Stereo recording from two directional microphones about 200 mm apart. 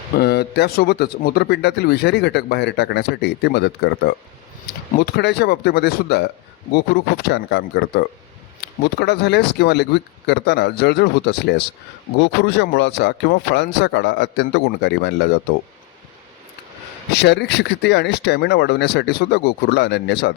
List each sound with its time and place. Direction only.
0.2 s a man's voice: 55° left (ahead or behind)
17.1 s speech: 55° left (ahead or behind)